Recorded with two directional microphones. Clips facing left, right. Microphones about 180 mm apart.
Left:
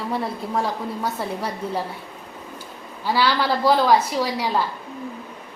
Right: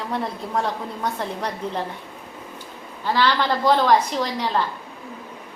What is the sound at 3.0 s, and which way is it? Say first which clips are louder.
A woman's voice: even; 10° left (ahead or behind).